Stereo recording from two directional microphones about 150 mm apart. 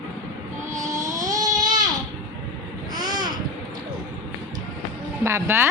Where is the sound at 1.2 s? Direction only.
25° right (ahead or behind).